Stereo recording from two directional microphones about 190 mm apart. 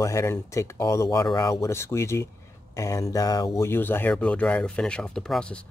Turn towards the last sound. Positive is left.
turn(degrees=5)  # may be behind; listen again after turning